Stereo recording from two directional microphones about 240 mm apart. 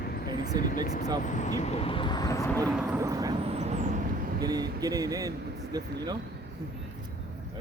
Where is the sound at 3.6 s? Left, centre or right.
Right.